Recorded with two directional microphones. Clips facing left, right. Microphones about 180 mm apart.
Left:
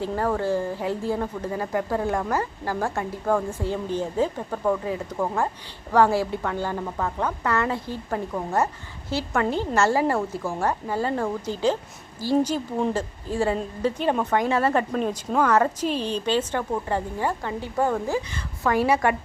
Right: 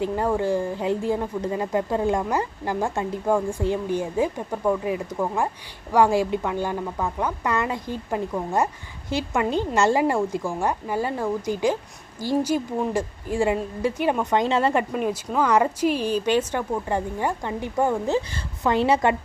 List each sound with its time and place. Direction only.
0.0 s a woman's voice: 15° right (ahead or behind)